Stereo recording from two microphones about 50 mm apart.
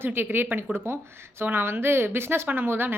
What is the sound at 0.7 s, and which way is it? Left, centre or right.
Speech, right.